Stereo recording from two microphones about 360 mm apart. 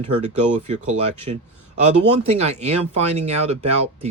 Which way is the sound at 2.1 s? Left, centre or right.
Centre.